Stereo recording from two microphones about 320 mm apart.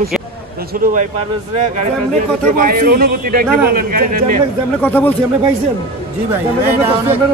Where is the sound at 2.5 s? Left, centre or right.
Right.